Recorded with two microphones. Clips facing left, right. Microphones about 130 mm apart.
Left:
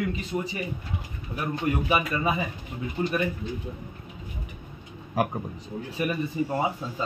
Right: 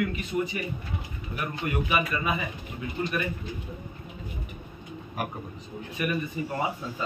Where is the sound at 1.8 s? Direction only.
30° left (ahead or behind).